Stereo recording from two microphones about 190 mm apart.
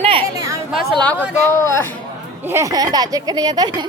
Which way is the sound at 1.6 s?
15° left (ahead or behind).